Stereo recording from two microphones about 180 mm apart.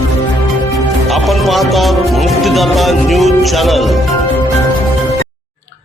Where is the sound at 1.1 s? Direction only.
Centre (ahead or behind).